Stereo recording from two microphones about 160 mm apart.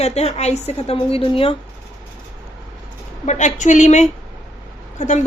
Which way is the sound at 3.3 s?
50° left (ahead or behind).